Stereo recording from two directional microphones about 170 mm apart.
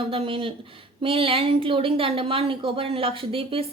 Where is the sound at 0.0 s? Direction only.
30° right (ahead or behind).